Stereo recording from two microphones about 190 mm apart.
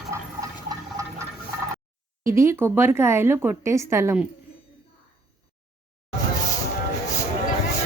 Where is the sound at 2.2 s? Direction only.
15° right (ahead or behind).